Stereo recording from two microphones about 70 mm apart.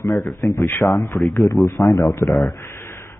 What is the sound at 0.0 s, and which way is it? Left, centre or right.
Speech, left.